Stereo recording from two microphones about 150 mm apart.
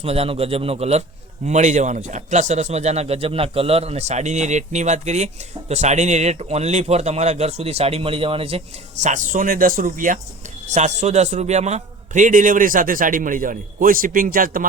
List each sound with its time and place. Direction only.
0.0 s a man's voice: 40° right (ahead or behind); by 10.2 s 65° right (ahead or behind)
10.7 s a man's voice: 50° right (ahead or behind); by 14.7 s 70° right (ahead or behind)